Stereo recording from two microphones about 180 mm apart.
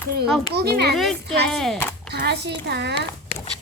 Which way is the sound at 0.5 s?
60° right (ahead or behind).